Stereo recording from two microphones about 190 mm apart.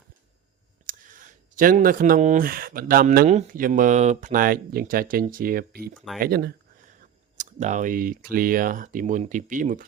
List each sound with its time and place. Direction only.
0.9 s speech: 45° right (ahead or behind)
7.0 s speech: 40° right (ahead or behind)